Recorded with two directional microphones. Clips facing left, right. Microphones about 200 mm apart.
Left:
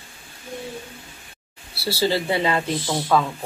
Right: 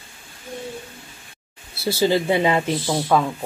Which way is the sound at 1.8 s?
15° right (ahead or behind).